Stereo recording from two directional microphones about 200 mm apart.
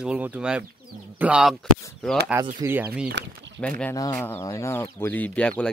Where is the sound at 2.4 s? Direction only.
15° right (ahead or behind).